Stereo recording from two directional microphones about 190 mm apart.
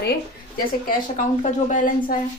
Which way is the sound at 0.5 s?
45° left (ahead or behind).